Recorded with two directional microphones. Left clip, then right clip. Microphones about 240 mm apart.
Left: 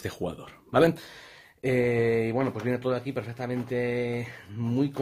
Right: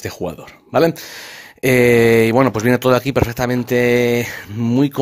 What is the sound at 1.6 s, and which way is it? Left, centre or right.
Speech, right.